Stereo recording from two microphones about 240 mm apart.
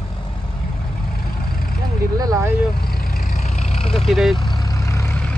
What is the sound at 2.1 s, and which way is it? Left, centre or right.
Speech, centre.